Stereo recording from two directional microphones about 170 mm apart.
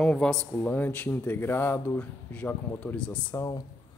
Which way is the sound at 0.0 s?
5° left (ahead or behind).